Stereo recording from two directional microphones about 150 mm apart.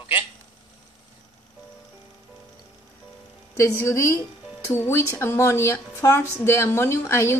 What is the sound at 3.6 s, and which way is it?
A woman's voice, 20° left (ahead or behind).